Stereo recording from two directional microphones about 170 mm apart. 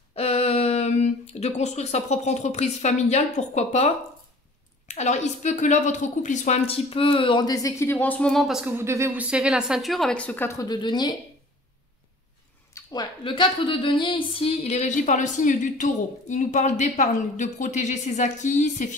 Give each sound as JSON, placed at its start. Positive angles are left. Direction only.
{"t": 0.1, "sound": "a woman's voice", "side_deg": 40}
{"t": 8.7, "sound": "a woman's voice", "side_deg": -15}
{"t": 12.7, "sound": "speech", "side_deg": 25}